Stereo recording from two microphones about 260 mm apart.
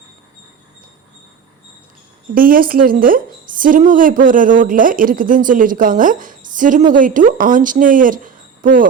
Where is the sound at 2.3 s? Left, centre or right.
Right.